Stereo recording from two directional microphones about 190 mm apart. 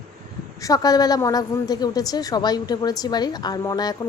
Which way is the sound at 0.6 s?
20° left (ahead or behind).